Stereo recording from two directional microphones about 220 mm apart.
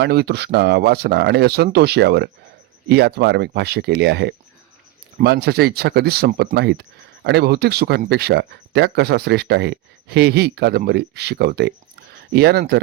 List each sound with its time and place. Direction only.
0.0 s speech: 45° right (ahead or behind)